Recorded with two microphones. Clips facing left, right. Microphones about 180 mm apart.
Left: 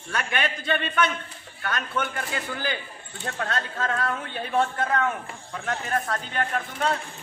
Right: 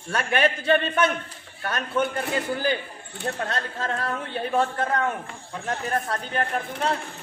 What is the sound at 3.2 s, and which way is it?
A woman's voice, 35° right (ahead or behind).